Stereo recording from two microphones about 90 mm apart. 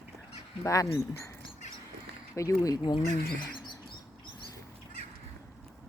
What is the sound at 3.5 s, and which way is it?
Bird, 55° left (ahead or behind).